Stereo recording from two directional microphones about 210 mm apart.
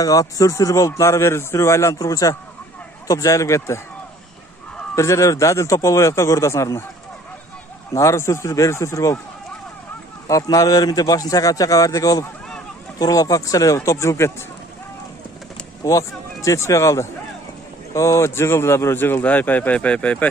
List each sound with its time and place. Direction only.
0.0 s a man's voice: 15° left (ahead or behind)
4.9 s a man's voice: 15° left (ahead or behind)
7.9 s a man's voice: 15° left (ahead or behind)
10.2 s a man's voice: 15° left (ahead or behind)
15.8 s a man's voice: 15° left (ahead or behind)